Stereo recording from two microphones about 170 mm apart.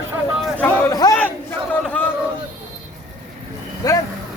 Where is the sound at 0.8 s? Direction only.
20° left (ahead or behind).